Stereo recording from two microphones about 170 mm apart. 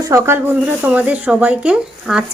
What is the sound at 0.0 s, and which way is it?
Speech, 15° right (ahead or behind).